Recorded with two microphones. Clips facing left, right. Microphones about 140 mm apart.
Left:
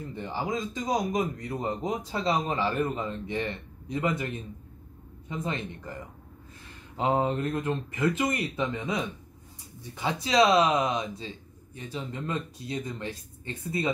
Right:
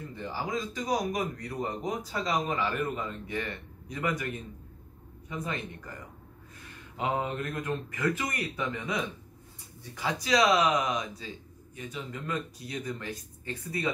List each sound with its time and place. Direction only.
0.1 s speech: 20° left (ahead or behind)
5.3 s speech: 25° left (ahead or behind)